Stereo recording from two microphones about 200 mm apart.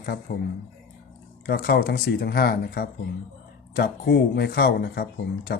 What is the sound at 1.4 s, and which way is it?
Speech, 50° left (ahead or behind).